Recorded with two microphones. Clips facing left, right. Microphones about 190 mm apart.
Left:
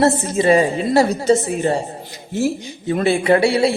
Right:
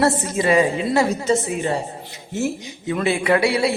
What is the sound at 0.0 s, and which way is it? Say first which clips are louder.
A man's voice: left 3 dB; 30° left (ahead or behind).